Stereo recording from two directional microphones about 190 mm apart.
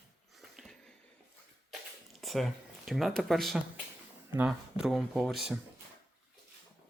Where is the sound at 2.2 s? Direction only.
Centre (ahead or behind).